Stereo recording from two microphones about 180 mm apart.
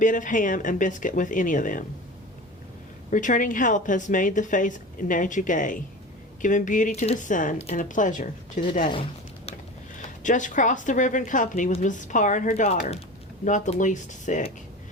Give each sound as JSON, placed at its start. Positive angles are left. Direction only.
{"t": 0.0, "sound": "a woman's voice", "side_deg": 45}
{"t": 3.1, "sound": "a woman's voice", "side_deg": 45}
{"t": 8.8, "sound": "speech", "side_deg": 30}
{"t": 10.2, "sound": "a woman's voice", "side_deg": 45}